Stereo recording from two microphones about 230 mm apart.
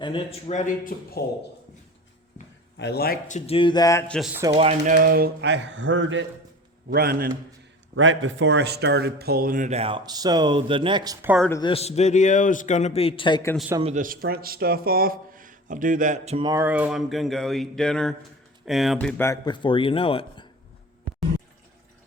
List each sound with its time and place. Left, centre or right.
0.0 s a man's voice: left
2.7 s a man's voice: left; by 4.0 s centre
4.5 s speech: right
6.9 s speech: right
7.9 s speech: right; by 11.4 s centre
11.4 s speech: centre
11.7 s a man's voice: left
13.9 s speech: right; by 20.5 s left